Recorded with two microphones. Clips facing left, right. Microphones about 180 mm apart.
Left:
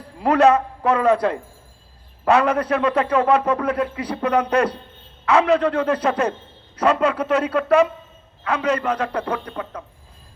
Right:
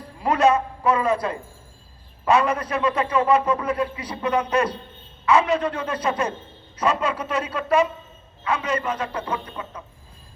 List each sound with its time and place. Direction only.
0.2 s a man's voice: 65° left (ahead or behind)